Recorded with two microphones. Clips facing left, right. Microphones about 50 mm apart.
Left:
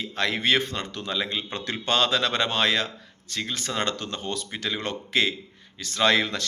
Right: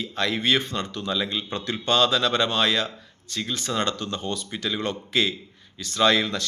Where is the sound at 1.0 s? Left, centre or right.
Left.